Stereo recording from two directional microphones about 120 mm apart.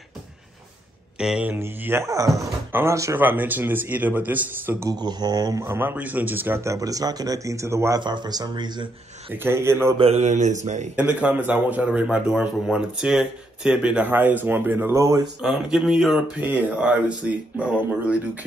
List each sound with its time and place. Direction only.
1.1 s speech: 5° right (ahead or behind)
4.8 s speech: 35° right (ahead or behind)
8.0 s speech: 40° right (ahead or behind)
9.3 s speech: 20° right (ahead or behind)
9.9 s mantra: 60° right (ahead or behind); by 10.9 s 80° right
11.0 s speech: 10° right (ahead or behind); by 15.2 s 25° right (ahead or behind)
15.4 s speech: 5° right (ahead or behind)
16.3 s speech: 15° right (ahead or behind)